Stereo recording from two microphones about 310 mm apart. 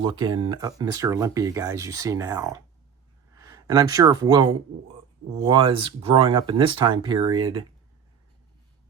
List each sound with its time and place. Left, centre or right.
0.0 s speech: centre